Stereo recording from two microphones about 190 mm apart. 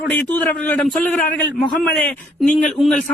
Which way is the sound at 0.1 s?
10° left (ahead or behind).